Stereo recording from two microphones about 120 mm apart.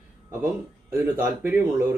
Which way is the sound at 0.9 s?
15° right (ahead or behind).